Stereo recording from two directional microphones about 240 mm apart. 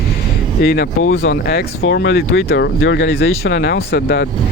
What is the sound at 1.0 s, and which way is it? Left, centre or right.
Speech, left.